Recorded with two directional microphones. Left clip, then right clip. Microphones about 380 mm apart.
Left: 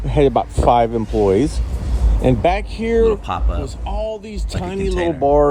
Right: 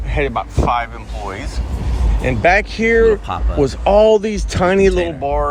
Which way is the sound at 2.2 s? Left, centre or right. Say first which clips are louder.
Right 3 dB; centre.